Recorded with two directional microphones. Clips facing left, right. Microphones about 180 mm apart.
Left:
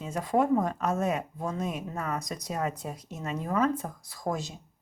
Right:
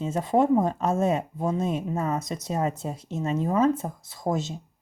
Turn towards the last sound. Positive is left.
turn(degrees=-25)  # may be behind; listen again after turning